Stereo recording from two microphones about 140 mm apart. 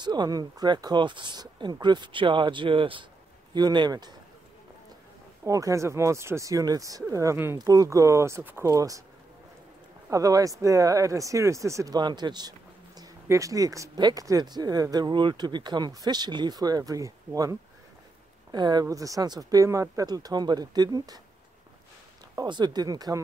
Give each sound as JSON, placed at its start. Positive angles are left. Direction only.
{"t": 0.0, "sound": "speech", "side_deg": -30}
{"t": 5.4, "sound": "speech", "side_deg": -25}
{"t": 10.0, "sound": "speech", "side_deg": -25}
{"t": 22.3, "sound": "speech", "side_deg": -30}